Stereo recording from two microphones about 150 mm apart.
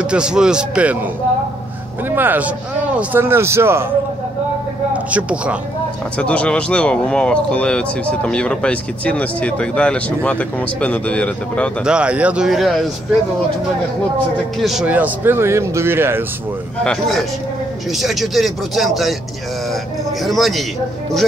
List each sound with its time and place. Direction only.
0.0 s speech: 5° right (ahead or behind)
2.0 s speech: 15° right (ahead or behind)
4.9 s speech: 10° right (ahead or behind)
6.1 s speech: 10° left (ahead or behind)
11.8 s speech: 5° right (ahead or behind)
14.6 s speech: 5° right (ahead or behind)
16.8 s speech: centre (ahead or behind)
20.2 s speech: centre (ahead or behind)